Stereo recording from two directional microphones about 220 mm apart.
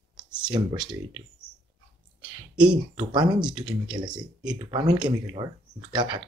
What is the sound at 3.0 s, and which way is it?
Speech, 20° right (ahead or behind).